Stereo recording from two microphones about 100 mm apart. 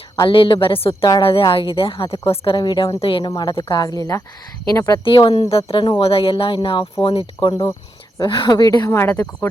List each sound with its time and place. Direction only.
0.2 s a woman's voice: 60° left (ahead or behind); by 4.9 s 35° left (ahead or behind)
5.0 s a woman's voice: 60° left (ahead or behind); by 9.0 s 40° left (ahead or behind)
9.0 s speech: 25° left (ahead or behind)